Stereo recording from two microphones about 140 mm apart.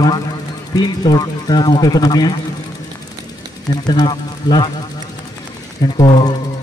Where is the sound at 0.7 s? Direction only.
30° left (ahead or behind).